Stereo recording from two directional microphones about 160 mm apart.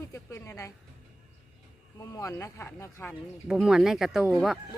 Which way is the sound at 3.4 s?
5° right (ahead or behind).